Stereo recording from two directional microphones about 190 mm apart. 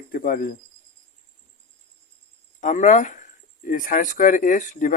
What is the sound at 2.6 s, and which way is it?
Speech, 40° left (ahead or behind).